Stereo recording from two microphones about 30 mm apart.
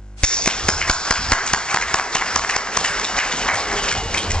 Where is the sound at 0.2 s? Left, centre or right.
Left.